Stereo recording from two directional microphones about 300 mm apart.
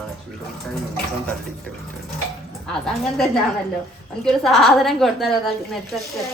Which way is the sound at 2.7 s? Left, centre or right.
Centre.